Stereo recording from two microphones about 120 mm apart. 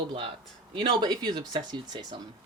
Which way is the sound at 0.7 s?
45° right (ahead or behind).